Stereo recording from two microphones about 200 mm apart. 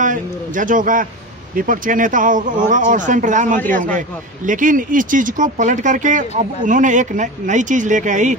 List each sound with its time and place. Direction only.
0.0 s speech: 40° right (ahead or behind)